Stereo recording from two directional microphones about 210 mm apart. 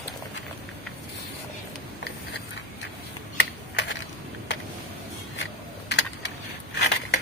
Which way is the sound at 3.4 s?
55° left (ahead or behind).